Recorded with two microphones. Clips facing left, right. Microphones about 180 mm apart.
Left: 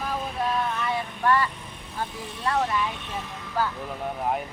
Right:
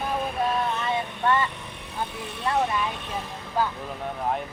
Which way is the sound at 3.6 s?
20° right (ahead or behind).